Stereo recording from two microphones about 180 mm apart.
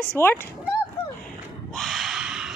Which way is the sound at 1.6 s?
Centre (ahead or behind).